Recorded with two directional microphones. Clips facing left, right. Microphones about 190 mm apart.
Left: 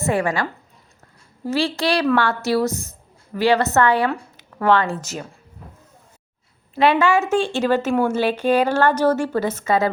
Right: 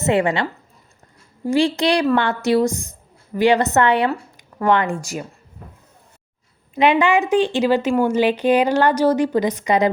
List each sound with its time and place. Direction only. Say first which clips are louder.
0.0 s speech: right 3 dB; 20° right (ahead or behind)
1.5 s a woman's voice: right 4 dB; 15° right (ahead or behind)
6.7 s a woman's voice: right 1 dB; 15° right (ahead or behind)